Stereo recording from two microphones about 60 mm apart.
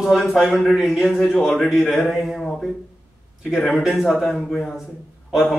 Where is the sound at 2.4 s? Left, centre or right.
Centre.